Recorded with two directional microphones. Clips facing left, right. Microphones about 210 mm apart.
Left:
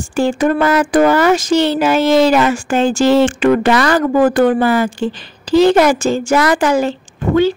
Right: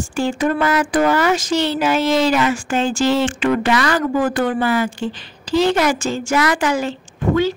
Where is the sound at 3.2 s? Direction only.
50° left (ahead or behind).